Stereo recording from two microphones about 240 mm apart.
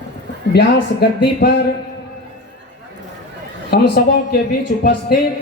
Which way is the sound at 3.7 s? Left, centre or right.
Left.